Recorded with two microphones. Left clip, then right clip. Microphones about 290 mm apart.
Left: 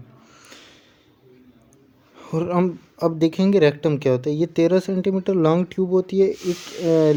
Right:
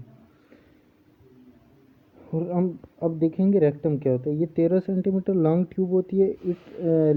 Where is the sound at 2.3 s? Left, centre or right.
Left.